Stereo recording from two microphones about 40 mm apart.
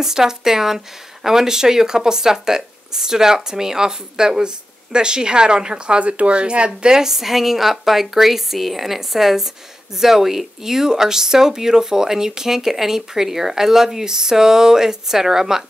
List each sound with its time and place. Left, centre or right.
0.0 s speech: centre